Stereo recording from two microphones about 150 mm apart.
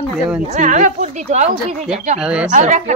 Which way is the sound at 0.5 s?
60° right (ahead or behind).